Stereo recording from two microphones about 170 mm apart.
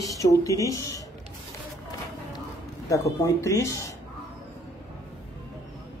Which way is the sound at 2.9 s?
15° left (ahead or behind).